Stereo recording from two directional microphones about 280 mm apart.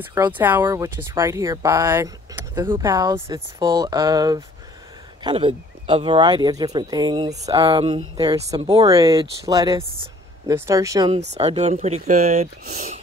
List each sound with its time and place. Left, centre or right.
0.0 s speech: centre